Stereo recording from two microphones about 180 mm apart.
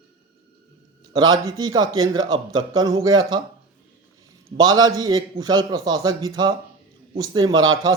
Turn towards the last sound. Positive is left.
turn(degrees=-25)  # may be behind; listen again after turning